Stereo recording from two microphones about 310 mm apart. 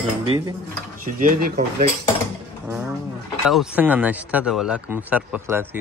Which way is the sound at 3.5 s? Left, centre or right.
Centre.